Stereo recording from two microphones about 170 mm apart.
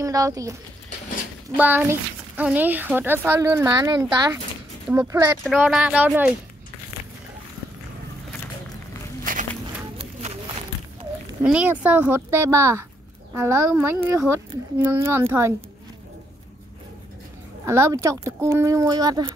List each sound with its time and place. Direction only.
0.0 s speech: 20° right (ahead or behind)
1.6 s speech: 10° right (ahead or behind)
5.7 s speech: 5° right (ahead or behind)
9.2 s walk: 50° right (ahead or behind)
9.9 s a sound: 35° right (ahead or behind)
11.4 s speech: 10° right (ahead or behind)
17.6 s speech: 15° right (ahead or behind)